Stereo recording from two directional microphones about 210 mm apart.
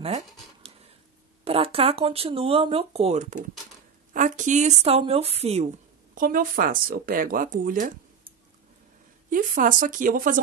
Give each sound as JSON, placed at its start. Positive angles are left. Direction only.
{"t": 0.0, "sound": "a sound", "side_deg": -30}
{"t": 1.4, "sound": "speech", "side_deg": -25}
{"t": 6.1, "sound": "speech", "side_deg": -40}
{"t": 9.3, "sound": "speech", "side_deg": -40}